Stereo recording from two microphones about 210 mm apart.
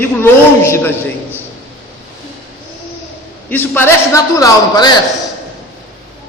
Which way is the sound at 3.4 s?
10° left (ahead or behind).